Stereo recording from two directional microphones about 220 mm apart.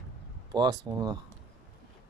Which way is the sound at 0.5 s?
20° right (ahead or behind).